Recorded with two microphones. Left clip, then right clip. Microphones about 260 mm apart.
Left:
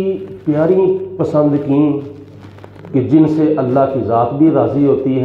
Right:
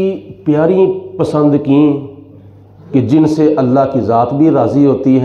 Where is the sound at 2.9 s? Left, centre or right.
Right.